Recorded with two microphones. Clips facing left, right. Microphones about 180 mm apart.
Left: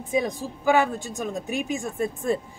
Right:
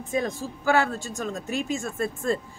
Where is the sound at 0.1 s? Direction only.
15° left (ahead or behind).